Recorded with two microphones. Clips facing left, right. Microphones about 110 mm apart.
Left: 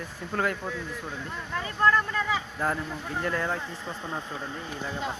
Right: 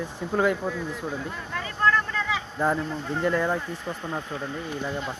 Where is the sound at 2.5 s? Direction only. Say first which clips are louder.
Right 8 dB; 15° right (ahead or behind).